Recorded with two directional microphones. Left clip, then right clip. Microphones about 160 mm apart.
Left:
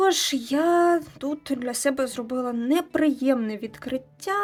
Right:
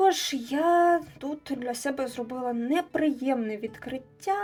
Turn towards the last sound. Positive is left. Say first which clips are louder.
# left 1 dB
turn(degrees=45)  # may be behind; listen again after turning